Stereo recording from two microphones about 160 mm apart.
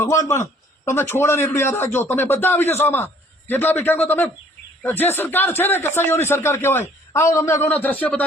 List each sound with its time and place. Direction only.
0.0 s a man's voice: 15° left (ahead or behind)